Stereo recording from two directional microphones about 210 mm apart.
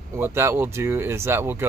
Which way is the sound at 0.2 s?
10° right (ahead or behind).